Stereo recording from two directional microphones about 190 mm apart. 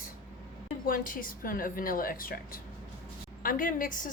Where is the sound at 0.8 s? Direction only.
45° left (ahead or behind).